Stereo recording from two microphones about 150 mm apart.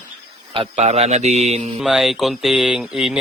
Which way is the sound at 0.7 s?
45° right (ahead or behind).